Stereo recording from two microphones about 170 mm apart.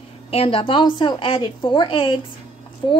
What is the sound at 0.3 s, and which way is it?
A woman's voice, 35° left (ahead or behind).